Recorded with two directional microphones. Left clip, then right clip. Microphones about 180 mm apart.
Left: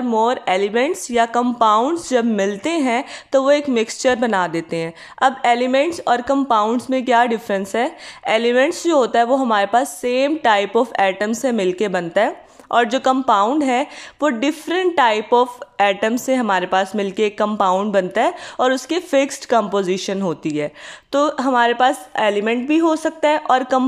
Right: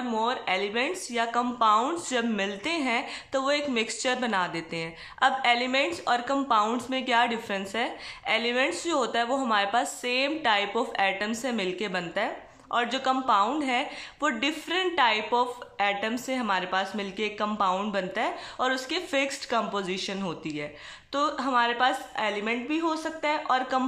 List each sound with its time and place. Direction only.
0.1 s speech: 35° left (ahead or behind)